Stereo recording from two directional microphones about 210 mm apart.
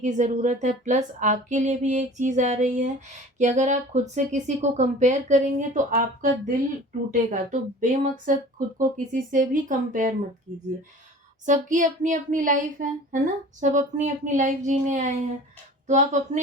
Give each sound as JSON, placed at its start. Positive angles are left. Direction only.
{"t": 0.0, "sound": "speech", "side_deg": -35}